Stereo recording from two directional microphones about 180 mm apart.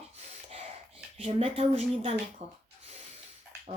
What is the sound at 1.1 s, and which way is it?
Speech, 30° right (ahead or behind).